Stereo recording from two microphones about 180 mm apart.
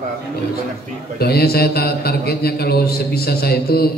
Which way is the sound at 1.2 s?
60° left (ahead or behind).